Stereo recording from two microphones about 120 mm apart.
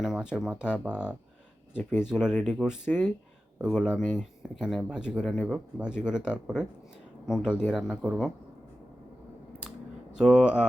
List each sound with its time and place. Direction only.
0.0 s speech: 5° right (ahead or behind)
1.8 s speech: 15° left (ahead or behind)
2.0 s speech: 5° right (ahead or behind)
10.2 s speech: 5° right (ahead or behind)